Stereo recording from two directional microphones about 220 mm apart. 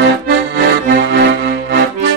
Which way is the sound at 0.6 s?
50° right (ahead or behind).